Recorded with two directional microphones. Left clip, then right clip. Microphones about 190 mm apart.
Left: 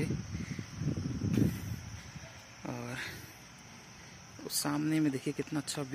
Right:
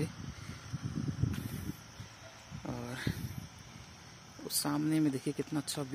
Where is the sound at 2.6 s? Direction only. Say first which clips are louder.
Left 1 dB; centre (ahead or behind).